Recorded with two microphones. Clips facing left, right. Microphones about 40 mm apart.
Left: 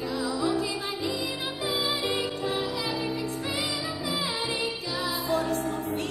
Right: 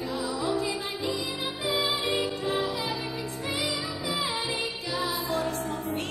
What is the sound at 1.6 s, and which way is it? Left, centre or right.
Music, right.